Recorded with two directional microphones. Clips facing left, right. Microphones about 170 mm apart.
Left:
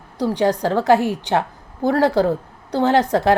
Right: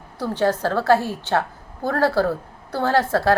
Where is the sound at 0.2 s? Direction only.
15° left (ahead or behind).